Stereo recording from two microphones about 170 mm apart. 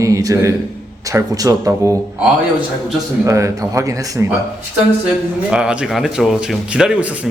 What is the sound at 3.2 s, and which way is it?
A man's voice, 20° right (ahead or behind).